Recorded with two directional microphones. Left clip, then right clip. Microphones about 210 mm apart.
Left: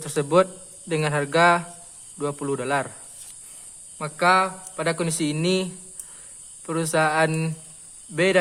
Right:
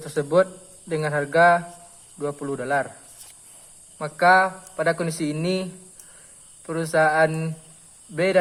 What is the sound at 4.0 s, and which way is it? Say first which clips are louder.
Speech: right 2 dB; 30° left (ahead or behind).